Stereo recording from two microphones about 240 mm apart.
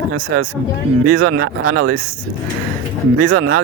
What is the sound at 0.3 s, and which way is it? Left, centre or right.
Speech, right.